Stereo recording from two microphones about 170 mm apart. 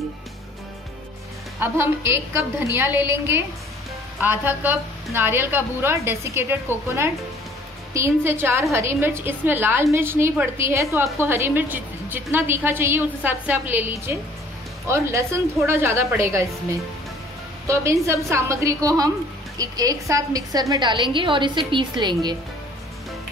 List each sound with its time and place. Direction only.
1.6 s a woman's voice: 15° right (ahead or behind)
7.9 s a woman's voice: 15° right (ahead or behind)
17.6 s a woman's voice: 15° right (ahead or behind)